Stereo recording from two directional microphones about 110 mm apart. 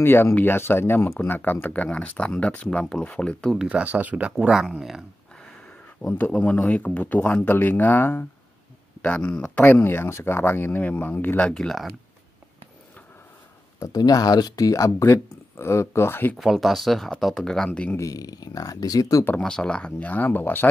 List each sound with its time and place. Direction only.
0.0 s speech: 20° left (ahead or behind)
3.5 s speech: 10° right (ahead or behind)
6.0 s speech: 15° left (ahead or behind)
13.9 s speech: 35° left (ahead or behind); by 16.3 s 20° left (ahead or behind)
16.3 s speech: centre (ahead or behind)
17.9 s speech: 30° left (ahead or behind)
19.2 s speech: 10° left (ahead or behind)